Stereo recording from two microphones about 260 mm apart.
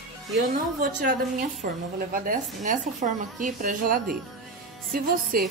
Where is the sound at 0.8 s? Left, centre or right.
Right.